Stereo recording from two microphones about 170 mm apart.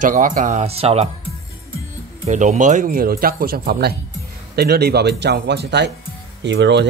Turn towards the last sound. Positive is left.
turn(degrees=-90)